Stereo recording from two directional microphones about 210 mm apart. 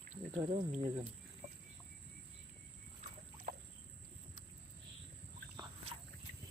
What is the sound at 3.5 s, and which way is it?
Boat, 40° right (ahead or behind).